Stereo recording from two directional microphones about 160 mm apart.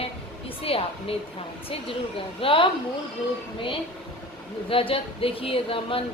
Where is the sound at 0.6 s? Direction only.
35° left (ahead or behind).